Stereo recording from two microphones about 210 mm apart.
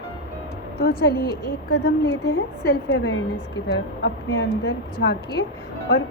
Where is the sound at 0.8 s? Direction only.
45° left (ahead or behind).